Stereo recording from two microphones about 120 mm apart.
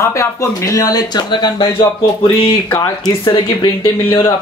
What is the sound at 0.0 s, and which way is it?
Speech, 25° left (ahead or behind).